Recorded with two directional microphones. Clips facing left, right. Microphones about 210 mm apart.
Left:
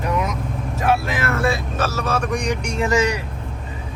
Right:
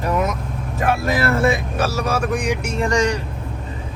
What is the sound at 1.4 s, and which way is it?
Vehicle, 15° right (ahead or behind).